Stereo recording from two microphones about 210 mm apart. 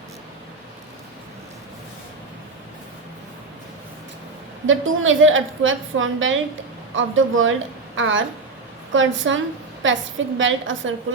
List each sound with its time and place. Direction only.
4.6 s a woman's voice: 70° right (ahead or behind)